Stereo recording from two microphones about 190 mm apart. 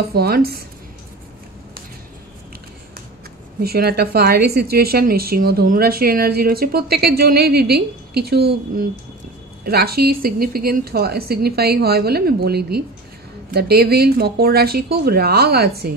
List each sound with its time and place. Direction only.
0.1 s a woman's voice: 55° right (ahead or behind)
3.6 s a woman's voice: 55° right (ahead or behind)